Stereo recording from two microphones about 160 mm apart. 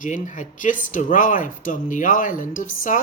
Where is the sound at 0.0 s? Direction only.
50° left (ahead or behind).